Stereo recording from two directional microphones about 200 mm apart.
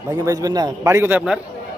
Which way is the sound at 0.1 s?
15° right (ahead or behind).